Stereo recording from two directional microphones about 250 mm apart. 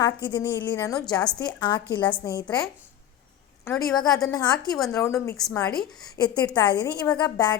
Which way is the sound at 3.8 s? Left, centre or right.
Centre.